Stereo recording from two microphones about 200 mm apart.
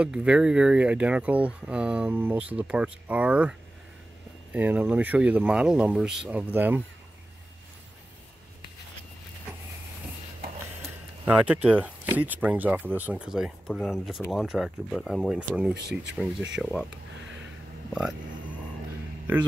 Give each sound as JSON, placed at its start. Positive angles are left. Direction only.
{"t": 0.0, "sound": "speech", "side_deg": -5}
{"t": 10.8, "sound": "a sound", "side_deg": -10}
{"t": 11.8, "sound": "speech", "side_deg": -10}
{"t": 15.7, "sound": "speech", "side_deg": -55}
{"t": 16.5, "sound": "speech", "side_deg": 0}